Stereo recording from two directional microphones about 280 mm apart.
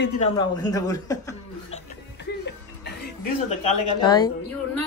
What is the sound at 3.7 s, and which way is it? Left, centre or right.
A woman's voice, centre.